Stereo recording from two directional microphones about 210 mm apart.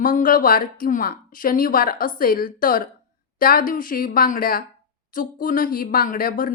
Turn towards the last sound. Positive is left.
turn(degrees=40)  # may be behind; listen again after turning